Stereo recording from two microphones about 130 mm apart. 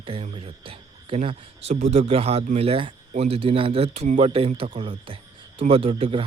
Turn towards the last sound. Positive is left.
turn(degrees=-45)  # may be behind; listen again after turning